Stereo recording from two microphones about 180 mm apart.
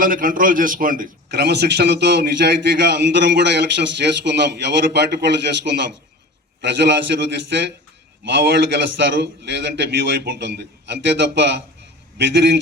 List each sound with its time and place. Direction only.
0.0 s a man's voice: 50° right (ahead or behind)
1.3 s a man's voice: 65° right (ahead or behind)